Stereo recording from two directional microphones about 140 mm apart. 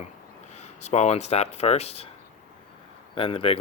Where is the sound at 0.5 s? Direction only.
55° left (ahead or behind).